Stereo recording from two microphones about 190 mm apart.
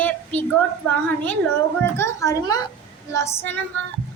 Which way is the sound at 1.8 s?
15° left (ahead or behind).